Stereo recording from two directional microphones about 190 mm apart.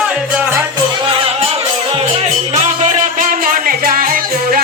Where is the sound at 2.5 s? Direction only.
40° right (ahead or behind).